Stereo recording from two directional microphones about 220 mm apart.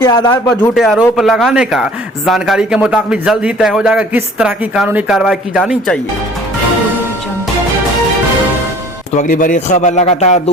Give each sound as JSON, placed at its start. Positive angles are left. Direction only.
{"t": 0.0, "sound": "speech", "side_deg": 15}
{"t": 0.7, "sound": "a man's voice", "side_deg": 0}
{"t": 9.1, "sound": "a man's voice", "side_deg": 35}